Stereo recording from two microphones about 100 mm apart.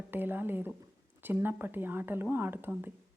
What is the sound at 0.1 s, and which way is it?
Speech, 20° right (ahead or behind).